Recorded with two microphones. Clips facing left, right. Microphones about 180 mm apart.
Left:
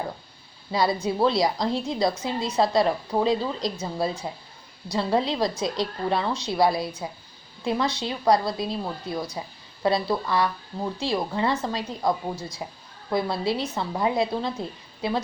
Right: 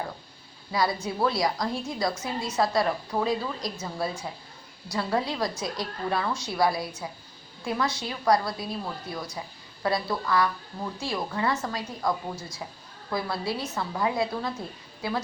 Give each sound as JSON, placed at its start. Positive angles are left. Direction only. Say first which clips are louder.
{"t": 0.7, "sound": "a woman's voice", "louder": "left 4 dB", "side_deg": 25}